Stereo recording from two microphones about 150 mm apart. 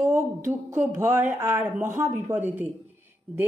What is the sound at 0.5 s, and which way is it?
Speech, 15° right (ahead or behind).